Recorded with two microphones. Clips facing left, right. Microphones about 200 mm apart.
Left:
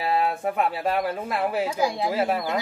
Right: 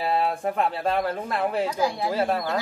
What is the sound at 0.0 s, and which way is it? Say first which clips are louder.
Speech: even; centre (ahead or behind).